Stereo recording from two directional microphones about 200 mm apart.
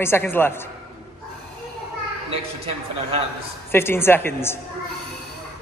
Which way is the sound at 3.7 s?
10° left (ahead or behind).